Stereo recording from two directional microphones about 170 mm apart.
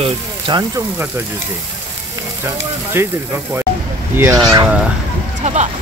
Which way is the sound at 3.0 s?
15° right (ahead or behind).